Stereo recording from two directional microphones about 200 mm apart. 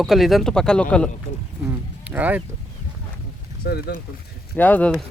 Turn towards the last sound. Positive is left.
turn(degrees=5)  # may be behind; listen again after turning